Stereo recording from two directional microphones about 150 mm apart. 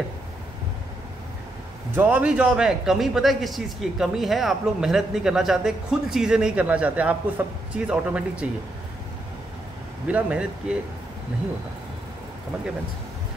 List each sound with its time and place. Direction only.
2.0 s a man's voice: 10° right (ahead or behind)
10.0 s speech: 10° right (ahead or behind)